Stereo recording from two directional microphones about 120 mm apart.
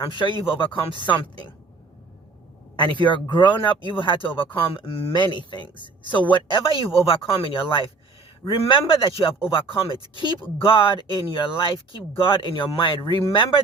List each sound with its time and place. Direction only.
0.0 s speech: 40° left (ahead or behind)
3.0 s speech: 40° left (ahead or behind)